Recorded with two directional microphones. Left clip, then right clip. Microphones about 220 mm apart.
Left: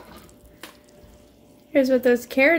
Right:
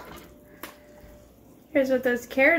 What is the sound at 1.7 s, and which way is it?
Speech, 40° left (ahead or behind).